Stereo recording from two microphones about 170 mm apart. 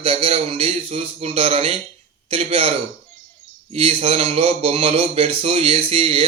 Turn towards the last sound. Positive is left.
turn(degrees=-30)  # may be behind; listen again after turning